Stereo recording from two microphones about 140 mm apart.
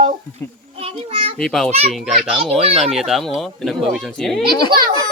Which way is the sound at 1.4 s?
5° left (ahead or behind).